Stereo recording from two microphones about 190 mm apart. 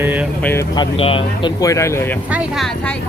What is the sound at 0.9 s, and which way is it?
Speech, 30° left (ahead or behind).